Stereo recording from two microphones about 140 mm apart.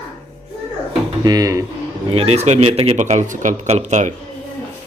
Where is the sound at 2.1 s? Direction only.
50° right (ahead or behind).